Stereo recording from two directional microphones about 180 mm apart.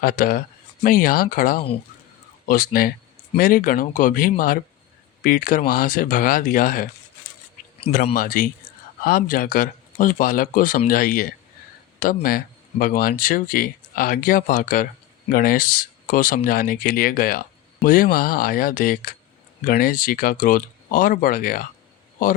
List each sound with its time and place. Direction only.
0.0 s speech: 50° left (ahead or behind)
8.1 s speech: 50° left (ahead or behind)